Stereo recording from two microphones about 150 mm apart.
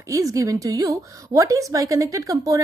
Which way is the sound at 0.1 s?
20° right (ahead or behind).